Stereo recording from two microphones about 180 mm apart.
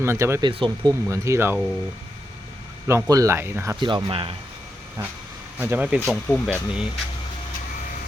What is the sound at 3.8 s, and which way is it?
Speech, 25° right (ahead or behind).